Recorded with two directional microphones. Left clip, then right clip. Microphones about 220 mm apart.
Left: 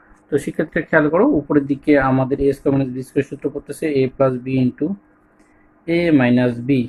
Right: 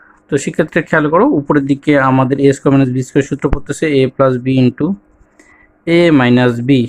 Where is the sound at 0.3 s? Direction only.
40° right (ahead or behind).